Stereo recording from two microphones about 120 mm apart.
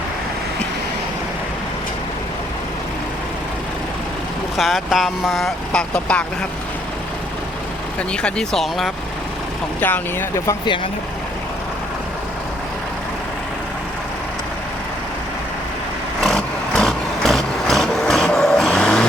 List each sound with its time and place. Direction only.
4.5 s speech: centre (ahead or behind)
8.1 s speech: 5° left (ahead or behind)
9.8 s speech: 15° left (ahead or behind)
16.2 s vehicle: 5° left (ahead or behind)